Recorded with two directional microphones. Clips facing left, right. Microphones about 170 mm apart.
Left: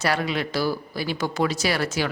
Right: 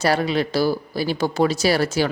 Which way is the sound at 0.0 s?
35° right (ahead or behind).